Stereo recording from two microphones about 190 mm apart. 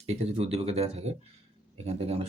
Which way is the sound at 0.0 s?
35° right (ahead or behind).